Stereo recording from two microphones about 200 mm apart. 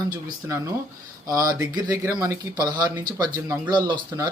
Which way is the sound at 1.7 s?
15° right (ahead or behind).